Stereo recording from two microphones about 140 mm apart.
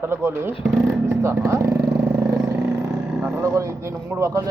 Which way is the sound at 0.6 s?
5° right (ahead or behind).